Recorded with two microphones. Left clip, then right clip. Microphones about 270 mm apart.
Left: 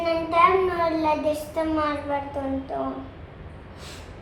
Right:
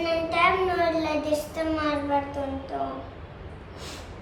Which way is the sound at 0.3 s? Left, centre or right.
Left.